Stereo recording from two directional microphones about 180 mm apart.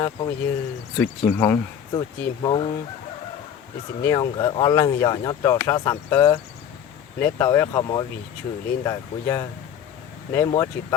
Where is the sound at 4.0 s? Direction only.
20° left (ahead or behind).